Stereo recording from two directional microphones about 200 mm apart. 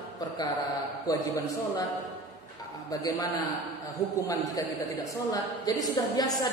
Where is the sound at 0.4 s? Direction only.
20° left (ahead or behind).